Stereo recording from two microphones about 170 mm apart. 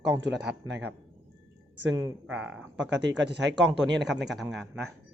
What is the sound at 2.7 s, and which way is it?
Speech, 90° right.